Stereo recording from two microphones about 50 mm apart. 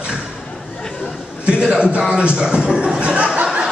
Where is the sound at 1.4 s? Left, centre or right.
Centre.